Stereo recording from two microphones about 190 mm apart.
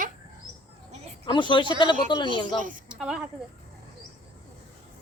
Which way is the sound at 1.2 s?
25° left (ahead or behind).